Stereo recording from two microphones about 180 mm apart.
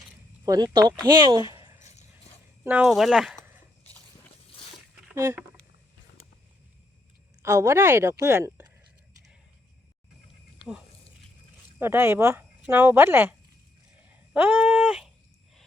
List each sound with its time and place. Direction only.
0.4 s speech: 20° right (ahead or behind)
1.5 s a sound: 20° right (ahead or behind)
2.6 s speech: 5° right (ahead or behind)
5.1 s speech: 10° right (ahead or behind)
7.4 s speech: 15° right (ahead or behind)
11.8 s speech: 15° right (ahead or behind)
14.0 s a sound: 10° right (ahead or behind)